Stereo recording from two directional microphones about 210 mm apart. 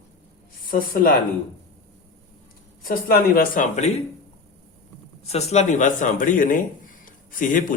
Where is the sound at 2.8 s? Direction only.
45° left (ahead or behind).